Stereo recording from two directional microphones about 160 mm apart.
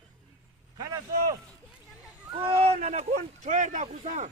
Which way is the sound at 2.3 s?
35° right (ahead or behind).